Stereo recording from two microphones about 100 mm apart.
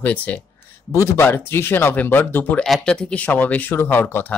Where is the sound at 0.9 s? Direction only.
25° left (ahead or behind).